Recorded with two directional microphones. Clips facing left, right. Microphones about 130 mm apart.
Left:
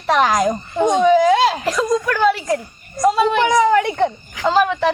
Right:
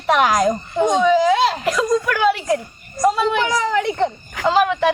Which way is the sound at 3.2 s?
15° left (ahead or behind).